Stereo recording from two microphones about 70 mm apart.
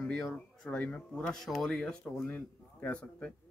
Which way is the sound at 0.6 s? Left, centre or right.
Centre.